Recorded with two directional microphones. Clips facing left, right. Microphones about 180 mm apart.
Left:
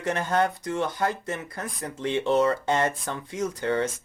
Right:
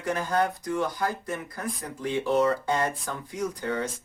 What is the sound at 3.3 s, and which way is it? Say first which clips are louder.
Speech: left 4 dB; 25° left (ahead or behind).